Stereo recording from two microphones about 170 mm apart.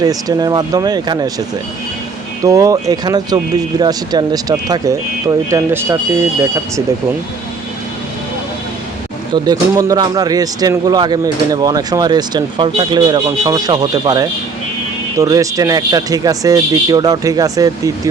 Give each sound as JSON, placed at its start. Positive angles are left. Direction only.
{"t": 0.0, "sound": "speech", "side_deg": -20}
{"t": 9.3, "sound": "speech", "side_deg": -20}